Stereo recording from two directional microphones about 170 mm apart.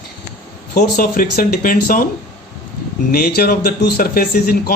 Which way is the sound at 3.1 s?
55° left (ahead or behind).